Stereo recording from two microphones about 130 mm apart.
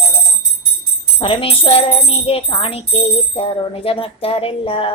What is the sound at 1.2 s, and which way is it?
Music, 45° left (ahead or behind).